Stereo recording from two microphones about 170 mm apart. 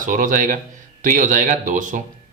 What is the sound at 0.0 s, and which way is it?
Speech, 50° right (ahead or behind).